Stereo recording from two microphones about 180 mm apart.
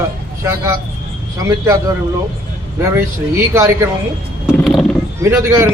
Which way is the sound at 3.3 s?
15° right (ahead or behind).